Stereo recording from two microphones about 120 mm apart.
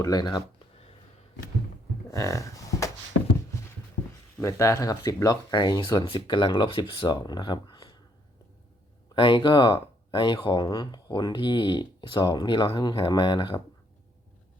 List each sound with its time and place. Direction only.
0.0 s speech: 35° left (ahead or behind)
2.0 s a sound: 25° left (ahead or behind)
4.4 s speech: 25° left (ahead or behind)
9.1 s speech: 45° left (ahead or behind)